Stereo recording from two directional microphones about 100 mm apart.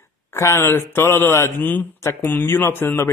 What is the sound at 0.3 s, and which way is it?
A man's voice, 25° left (ahead or behind).